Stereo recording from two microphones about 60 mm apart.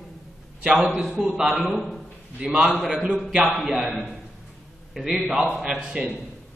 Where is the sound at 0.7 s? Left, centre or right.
Centre.